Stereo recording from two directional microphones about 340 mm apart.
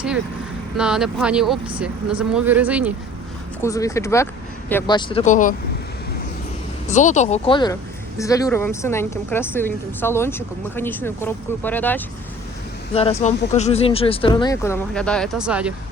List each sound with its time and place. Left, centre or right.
0.8 s speech: centre
3.6 s a woman's voice: centre
6.8 s a woman's voice: left; by 12.0 s centre
12.9 s a woman's voice: centre